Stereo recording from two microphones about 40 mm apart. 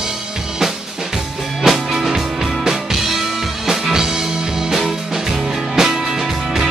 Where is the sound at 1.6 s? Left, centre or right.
Centre.